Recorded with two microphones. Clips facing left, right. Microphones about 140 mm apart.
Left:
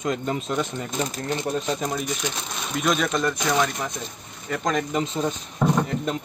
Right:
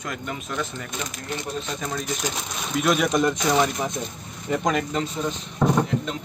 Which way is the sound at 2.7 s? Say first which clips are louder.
Right 2 dB; 5° right (ahead or behind).